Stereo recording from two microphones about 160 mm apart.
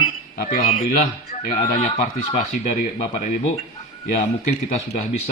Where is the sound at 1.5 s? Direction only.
45° left (ahead or behind).